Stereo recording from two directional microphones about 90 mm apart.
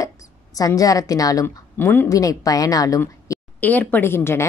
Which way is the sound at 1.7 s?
25° left (ahead or behind).